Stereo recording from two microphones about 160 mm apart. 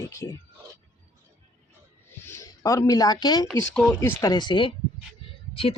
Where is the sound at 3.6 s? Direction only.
5° left (ahead or behind).